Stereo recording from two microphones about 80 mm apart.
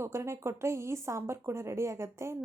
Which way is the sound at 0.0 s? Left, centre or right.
Right.